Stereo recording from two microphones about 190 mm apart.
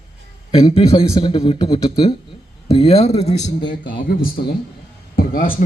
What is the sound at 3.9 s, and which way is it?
Speech, 50° left (ahead or behind).